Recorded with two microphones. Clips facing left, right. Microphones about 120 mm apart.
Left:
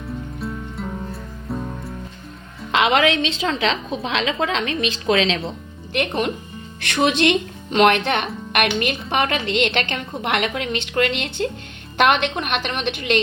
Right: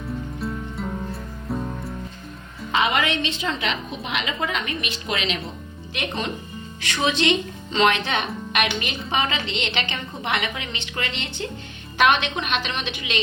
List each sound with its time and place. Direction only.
0.3 s music: centre (ahead or behind)
2.7 s a woman's voice: 90° left
5.9 s a woman's voice: 55° left (ahead or behind)